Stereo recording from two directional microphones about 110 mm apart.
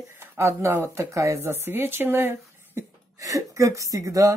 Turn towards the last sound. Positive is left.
turn(degrees=-30)  # may be behind; listen again after turning